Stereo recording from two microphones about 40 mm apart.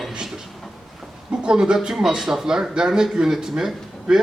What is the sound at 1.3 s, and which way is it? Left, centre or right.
Speech, right.